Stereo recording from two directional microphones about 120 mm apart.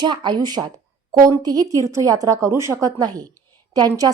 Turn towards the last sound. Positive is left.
turn(degrees=-30)  # may be behind; listen again after turning